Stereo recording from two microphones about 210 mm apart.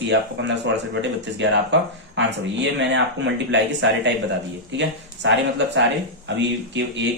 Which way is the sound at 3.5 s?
60° right (ahead or behind).